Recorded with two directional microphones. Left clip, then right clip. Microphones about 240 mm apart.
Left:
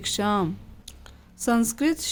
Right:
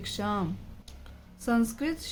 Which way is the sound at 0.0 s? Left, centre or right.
Left.